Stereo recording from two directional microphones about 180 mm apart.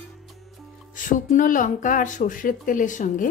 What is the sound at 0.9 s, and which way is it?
Speech, 45° left (ahead or behind).